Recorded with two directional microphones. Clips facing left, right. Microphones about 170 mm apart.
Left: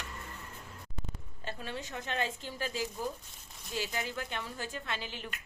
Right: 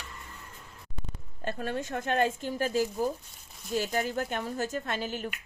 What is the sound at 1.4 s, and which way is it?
Speech, 50° right (ahead or behind).